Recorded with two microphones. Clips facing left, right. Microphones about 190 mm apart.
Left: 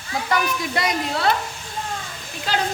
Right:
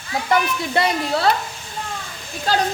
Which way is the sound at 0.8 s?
30° right (ahead or behind).